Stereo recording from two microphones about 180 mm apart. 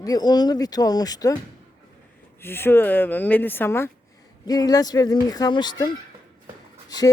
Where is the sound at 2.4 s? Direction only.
10° left (ahead or behind).